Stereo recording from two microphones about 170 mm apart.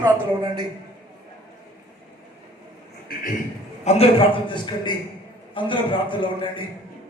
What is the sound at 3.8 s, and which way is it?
A man's voice, 35° left (ahead or behind).